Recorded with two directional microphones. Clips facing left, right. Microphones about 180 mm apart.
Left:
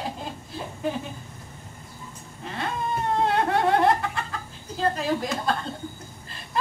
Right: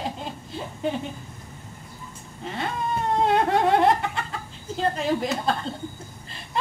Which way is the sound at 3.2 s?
20° right (ahead or behind).